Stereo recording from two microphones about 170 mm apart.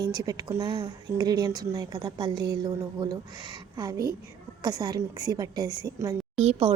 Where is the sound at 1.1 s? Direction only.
20° right (ahead or behind).